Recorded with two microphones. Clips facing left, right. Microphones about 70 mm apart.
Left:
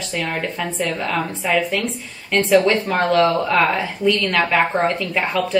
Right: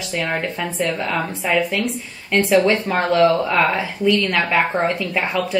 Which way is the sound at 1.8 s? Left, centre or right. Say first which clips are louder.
Right 2 dB; centre.